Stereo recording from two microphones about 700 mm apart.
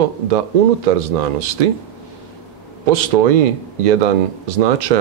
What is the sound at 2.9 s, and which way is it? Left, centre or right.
Speech, right.